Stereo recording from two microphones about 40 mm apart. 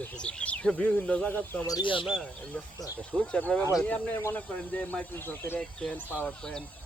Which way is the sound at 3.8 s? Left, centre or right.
Left.